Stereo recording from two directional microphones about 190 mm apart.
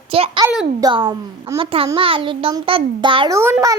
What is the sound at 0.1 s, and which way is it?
A child's voice, 30° right (ahead or behind).